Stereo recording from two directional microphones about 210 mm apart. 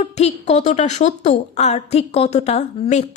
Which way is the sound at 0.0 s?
30° left (ahead or behind).